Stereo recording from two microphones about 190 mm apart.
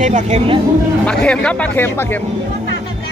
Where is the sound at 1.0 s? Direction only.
5° left (ahead or behind).